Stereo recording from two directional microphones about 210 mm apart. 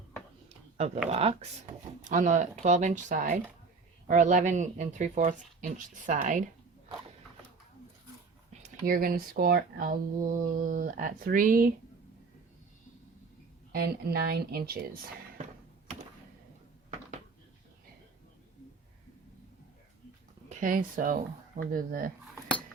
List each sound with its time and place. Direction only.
1.1 s speech: 30° right (ahead or behind)
8.6 s speech: 45° right (ahead or behind)
13.7 s speech: 45° right (ahead or behind)
20.5 s speech: 40° right (ahead or behind)